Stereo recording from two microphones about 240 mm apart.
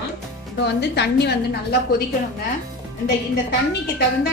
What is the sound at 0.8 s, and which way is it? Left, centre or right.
Speech, left.